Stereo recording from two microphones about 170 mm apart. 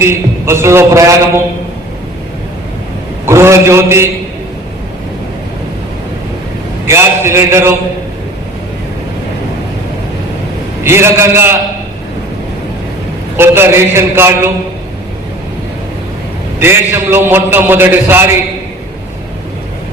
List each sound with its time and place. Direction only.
0.0 s a man's voice: 15° right (ahead or behind)
3.2 s a man's voice: 15° right (ahead or behind)
6.8 s a man's voice: 15° right (ahead or behind)
10.8 s a man's voice: 15° right (ahead or behind)
13.3 s a man's voice: 15° right (ahead or behind)
16.6 s a man's voice: 15° right (ahead or behind)